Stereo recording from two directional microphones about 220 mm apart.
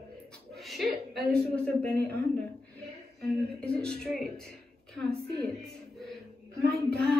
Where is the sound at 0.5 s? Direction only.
Centre (ahead or behind).